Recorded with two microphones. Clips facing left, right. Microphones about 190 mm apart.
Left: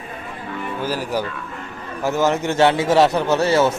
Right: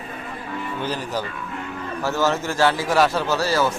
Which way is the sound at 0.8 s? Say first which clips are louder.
Left 4 dB; 10° left (ahead or behind).